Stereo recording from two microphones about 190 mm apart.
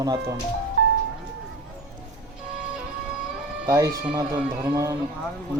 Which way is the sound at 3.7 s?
20° right (ahead or behind).